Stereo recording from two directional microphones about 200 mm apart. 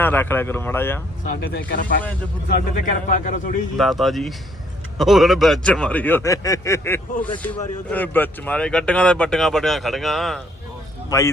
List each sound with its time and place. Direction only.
0.0 s a man's voice: 10° left (ahead or behind)
1.2 s speech: 50° left (ahead or behind)
3.1 s a man's voice: 40° left (ahead or behind)
3.8 s a man's voice: centre (ahead or behind)
11.1 s a man's voice: 15° left (ahead or behind)